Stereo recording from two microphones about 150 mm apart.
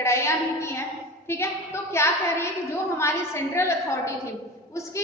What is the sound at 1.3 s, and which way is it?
A woman's voice, 20° left (ahead or behind).